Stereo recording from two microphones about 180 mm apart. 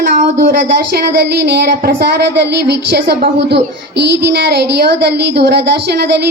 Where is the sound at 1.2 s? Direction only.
60° right (ahead or behind).